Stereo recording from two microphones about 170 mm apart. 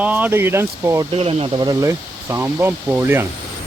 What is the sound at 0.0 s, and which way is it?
Speech, 10° right (ahead or behind).